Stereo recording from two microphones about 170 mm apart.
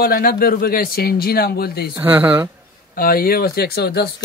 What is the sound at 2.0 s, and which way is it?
Speech, 10° right (ahead or behind).